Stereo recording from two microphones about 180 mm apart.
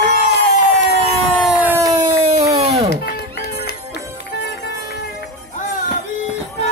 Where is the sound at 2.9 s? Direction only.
60° left (ahead or behind).